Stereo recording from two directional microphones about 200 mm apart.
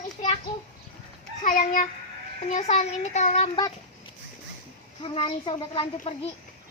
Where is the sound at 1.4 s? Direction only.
40° left (ahead or behind); by 3.7 s 25° left (ahead or behind).